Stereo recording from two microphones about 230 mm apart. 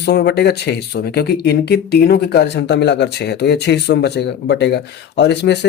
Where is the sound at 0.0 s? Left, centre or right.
Left.